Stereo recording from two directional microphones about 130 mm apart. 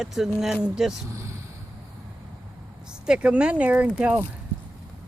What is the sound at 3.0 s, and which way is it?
Speech, 5° right (ahead or behind).